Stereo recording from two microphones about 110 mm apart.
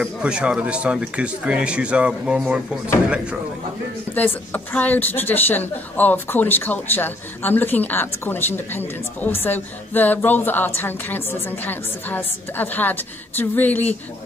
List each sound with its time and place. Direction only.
0.2 s speech: 10° right (ahead or behind)
4.1 s a woman's voice: 15° left (ahead or behind)